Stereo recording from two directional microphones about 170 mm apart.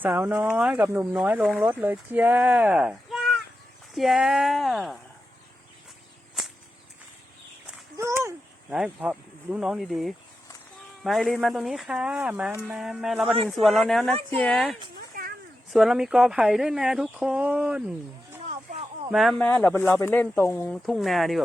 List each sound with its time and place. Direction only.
0.0 s speech: 10° right (ahead or behind)
7.9 s a sound: 15° right (ahead or behind)
8.7 s speech: 5° right (ahead or behind)
14.9 s a sound: 60° right (ahead or behind)
15.7 s speech: centre (ahead or behind)
18.4 s snake: 40° right (ahead or behind)
19.1 s speech: centre (ahead or behind)
19.5 s speech: 10° left (ahead or behind)